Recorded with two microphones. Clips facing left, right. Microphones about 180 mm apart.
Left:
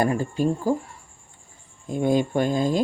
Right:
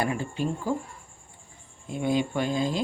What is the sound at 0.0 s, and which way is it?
Speech, 40° left (ahead or behind).